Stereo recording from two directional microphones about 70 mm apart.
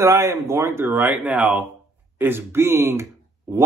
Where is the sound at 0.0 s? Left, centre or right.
Right; by 1.7 s centre.